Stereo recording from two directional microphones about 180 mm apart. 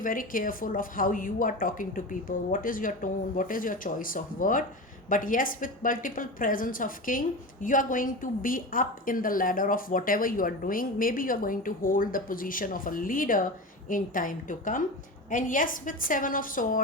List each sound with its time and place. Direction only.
0.0 s a woman's voice: 50° left (ahead or behind)